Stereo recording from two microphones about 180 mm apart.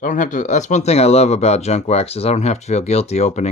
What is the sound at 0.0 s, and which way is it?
Speech, 45° left (ahead or behind).